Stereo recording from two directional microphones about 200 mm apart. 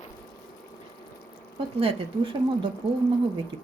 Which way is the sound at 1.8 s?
30° right (ahead or behind).